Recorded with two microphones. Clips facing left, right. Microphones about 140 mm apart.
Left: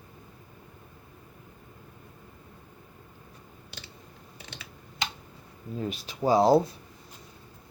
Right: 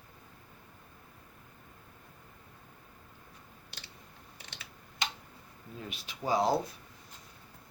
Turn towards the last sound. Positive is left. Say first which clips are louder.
# left 8 dB
turn(degrees=35)  # may be behind; listen again after turning